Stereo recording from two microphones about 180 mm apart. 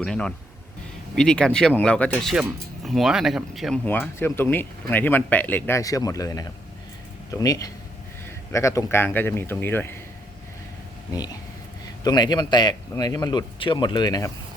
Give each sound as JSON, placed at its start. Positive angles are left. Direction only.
{"t": 0.0, "sound": "speech", "side_deg": 5}
{"t": 3.8, "sound": "speech", "side_deg": 10}
{"t": 12.0, "sound": "a man's voice", "side_deg": 25}